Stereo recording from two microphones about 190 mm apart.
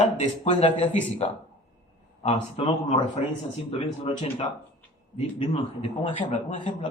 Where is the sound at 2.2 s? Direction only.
30° left (ahead or behind).